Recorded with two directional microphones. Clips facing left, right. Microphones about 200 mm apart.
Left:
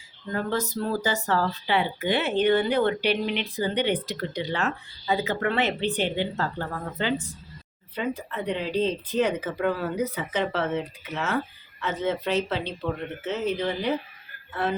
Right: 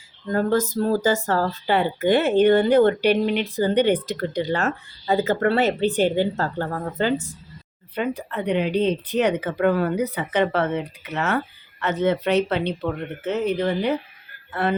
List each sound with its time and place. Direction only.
0.3 s speech: 45° right (ahead or behind)
7.9 s speech: 65° right (ahead or behind)